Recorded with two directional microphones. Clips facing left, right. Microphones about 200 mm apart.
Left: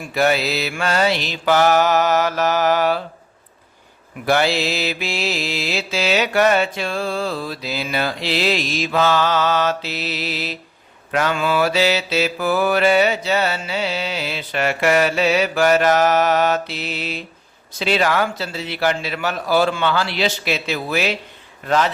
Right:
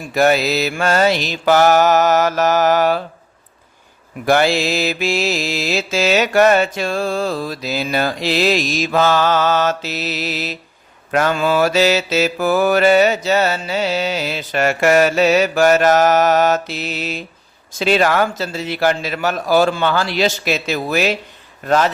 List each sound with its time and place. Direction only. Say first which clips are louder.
0.1 s mantra: right 4 dB; 45° right (ahead or behind)
4.3 s mantra: right 3 dB; 45° right (ahead or behind)